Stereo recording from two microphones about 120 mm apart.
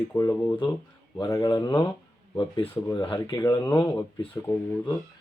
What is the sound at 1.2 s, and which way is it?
Speech, 35° left (ahead or behind).